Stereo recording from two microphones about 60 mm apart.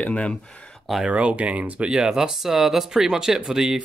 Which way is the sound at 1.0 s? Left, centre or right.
Right.